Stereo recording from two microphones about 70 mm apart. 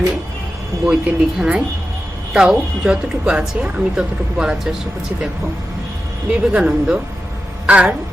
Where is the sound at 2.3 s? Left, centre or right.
Centre.